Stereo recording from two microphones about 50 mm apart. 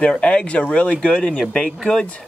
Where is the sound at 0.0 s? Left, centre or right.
Left.